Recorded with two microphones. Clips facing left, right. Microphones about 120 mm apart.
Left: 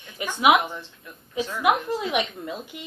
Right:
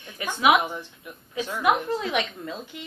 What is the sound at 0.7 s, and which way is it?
Speech, 15° right (ahead or behind).